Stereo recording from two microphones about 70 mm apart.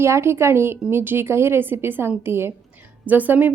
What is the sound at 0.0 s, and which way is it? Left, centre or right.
Speech, right.